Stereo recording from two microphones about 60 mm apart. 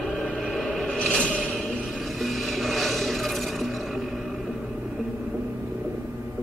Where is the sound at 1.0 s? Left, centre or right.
Centre.